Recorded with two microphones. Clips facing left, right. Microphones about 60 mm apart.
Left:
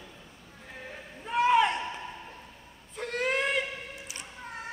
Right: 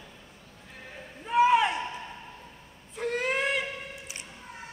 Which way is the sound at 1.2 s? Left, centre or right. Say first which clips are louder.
Right 2 dB; centre.